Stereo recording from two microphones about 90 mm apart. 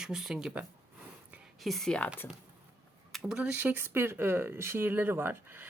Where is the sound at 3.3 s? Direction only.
15° right (ahead or behind).